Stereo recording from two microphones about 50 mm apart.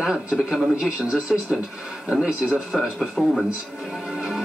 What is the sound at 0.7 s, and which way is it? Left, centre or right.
Speech, centre.